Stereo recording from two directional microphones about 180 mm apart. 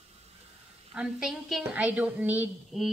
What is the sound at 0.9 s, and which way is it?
A woman's voice, 5° right (ahead or behind).